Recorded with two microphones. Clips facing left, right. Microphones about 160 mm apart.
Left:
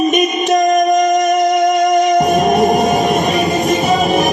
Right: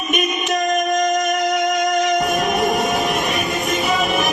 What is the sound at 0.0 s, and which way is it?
Music, 40° left (ahead or behind).